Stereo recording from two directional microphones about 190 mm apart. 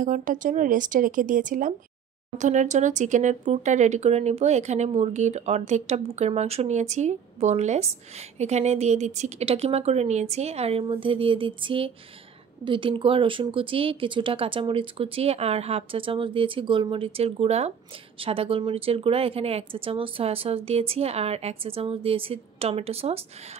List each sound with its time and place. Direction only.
0.0 s speech: 45° right (ahead or behind)